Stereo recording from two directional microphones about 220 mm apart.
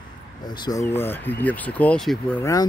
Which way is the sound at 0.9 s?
10° left (ahead or behind).